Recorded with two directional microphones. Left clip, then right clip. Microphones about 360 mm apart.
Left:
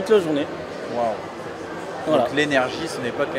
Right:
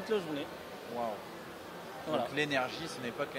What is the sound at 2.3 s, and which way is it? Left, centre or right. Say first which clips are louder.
Speech: left 13 dB; right.